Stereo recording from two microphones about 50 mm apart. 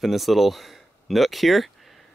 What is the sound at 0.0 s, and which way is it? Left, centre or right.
Speech, centre.